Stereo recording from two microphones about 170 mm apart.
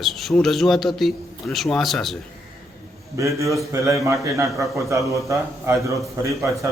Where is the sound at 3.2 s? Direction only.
20° right (ahead or behind).